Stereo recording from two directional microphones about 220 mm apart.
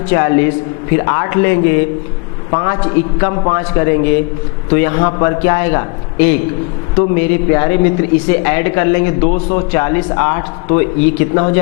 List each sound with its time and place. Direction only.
0.1 s a man's voice: 15° left (ahead or behind)